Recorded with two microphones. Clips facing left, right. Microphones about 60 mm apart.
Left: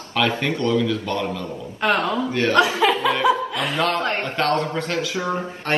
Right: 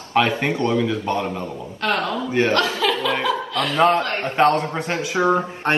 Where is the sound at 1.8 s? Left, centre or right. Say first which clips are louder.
Left 2 dB; left.